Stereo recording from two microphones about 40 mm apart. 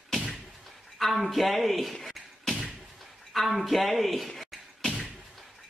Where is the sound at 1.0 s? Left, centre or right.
Centre.